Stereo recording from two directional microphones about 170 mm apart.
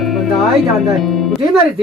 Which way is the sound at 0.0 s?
Centre (ahead or behind).